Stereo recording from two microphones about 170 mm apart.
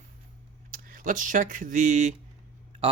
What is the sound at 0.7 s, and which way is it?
Speech, 55° right (ahead or behind).